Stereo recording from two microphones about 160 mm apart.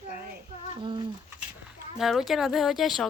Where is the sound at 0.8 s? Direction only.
30° right (ahead or behind).